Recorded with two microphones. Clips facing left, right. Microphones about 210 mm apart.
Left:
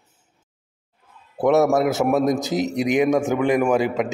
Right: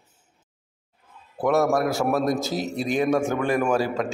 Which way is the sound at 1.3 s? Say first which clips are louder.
Left 4 dB; 20° left (ahead or behind).